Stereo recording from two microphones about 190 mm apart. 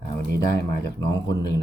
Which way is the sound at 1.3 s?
20° left (ahead or behind).